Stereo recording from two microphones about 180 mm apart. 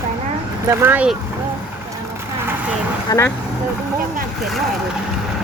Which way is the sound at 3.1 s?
15° left (ahead or behind).